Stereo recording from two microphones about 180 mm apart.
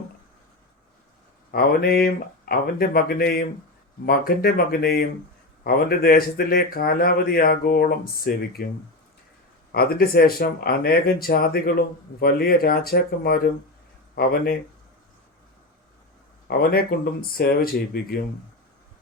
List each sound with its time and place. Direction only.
1.5 s speech: 55° left (ahead or behind)
9.7 s speech: 60° left (ahead or behind)
16.5 s speech: 55° left (ahead or behind)